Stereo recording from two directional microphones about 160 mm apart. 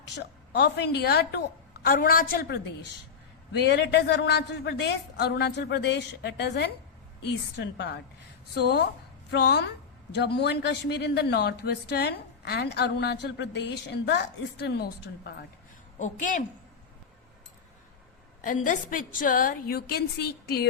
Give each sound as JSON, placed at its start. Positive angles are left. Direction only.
{"t": 0.0, "sound": "a woman's voice", "side_deg": 90}
{"t": 1.8, "sound": "a woman's voice", "side_deg": 70}
{"t": 3.6, "sound": "speech", "side_deg": 90}
{"t": 16.0, "sound": "a woman's voice", "side_deg": 50}
{"t": 18.4, "sound": "a woman's voice", "side_deg": 55}